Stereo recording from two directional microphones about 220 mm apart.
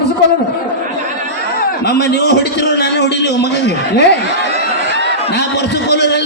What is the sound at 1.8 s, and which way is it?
A man's voice, 50° left (ahead or behind).